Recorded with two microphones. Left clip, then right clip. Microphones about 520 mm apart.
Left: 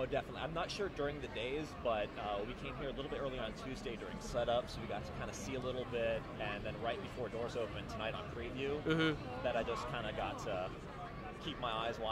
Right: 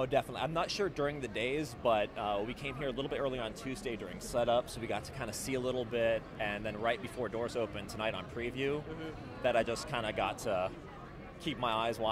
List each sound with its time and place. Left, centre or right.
0.0 s speech: right